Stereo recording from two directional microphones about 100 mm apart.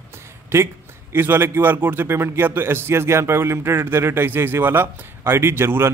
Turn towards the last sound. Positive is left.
turn(degrees=-25)  # may be behind; listen again after turning